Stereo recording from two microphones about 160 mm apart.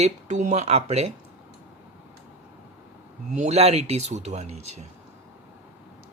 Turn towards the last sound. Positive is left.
turn(degrees=-45)  # may be behind; listen again after turning